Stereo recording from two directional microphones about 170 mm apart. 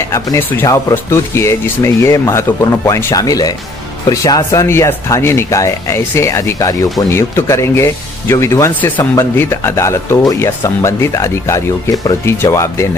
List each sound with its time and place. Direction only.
0.1 s speech: 15° left (ahead or behind)